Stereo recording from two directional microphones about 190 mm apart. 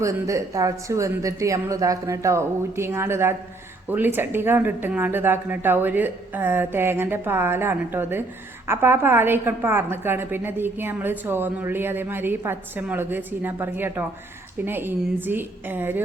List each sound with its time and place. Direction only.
0.0 s a woman's voice: 15° right (ahead or behind)